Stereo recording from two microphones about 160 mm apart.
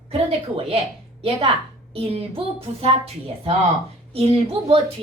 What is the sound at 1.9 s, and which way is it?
Speech, 40° right (ahead or behind).